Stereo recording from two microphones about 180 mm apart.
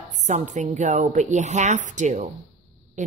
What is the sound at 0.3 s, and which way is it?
A woman's voice, 40° right (ahead or behind).